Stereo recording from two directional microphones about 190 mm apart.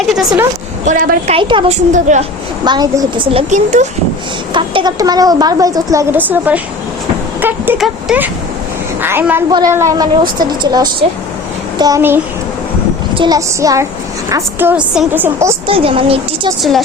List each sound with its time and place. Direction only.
0.0 s speech: centre (ahead or behind)
0.9 s a woman's voice: 40° right (ahead or behind)
1.4 s a woman's voice: 25° right (ahead or behind)
1.9 s a woman's voice: 40° right (ahead or behind)
2.6 s a woman's voice: 20° right (ahead or behind)
3.5 s a woman's voice: 40° right (ahead or behind)
4.5 s a woman's voice: 25° right (ahead or behind)
15.6 s a woman's voice: 30° right (ahead or behind)